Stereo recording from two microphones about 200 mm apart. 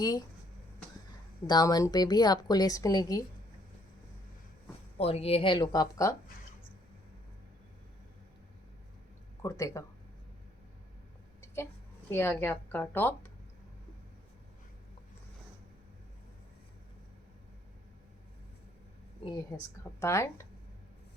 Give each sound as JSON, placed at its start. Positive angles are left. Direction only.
{"t": 0.0, "sound": "a woman's voice", "side_deg": 20}
{"t": 1.5, "sound": "a woman's voice", "side_deg": 20}
{"t": 4.9, "sound": "a woman's voice", "side_deg": 30}
{"t": 9.4, "sound": "speech", "side_deg": 15}
{"t": 11.3, "sound": "a woman's voice", "side_deg": 15}
{"t": 19.2, "sound": "a woman's voice", "side_deg": 20}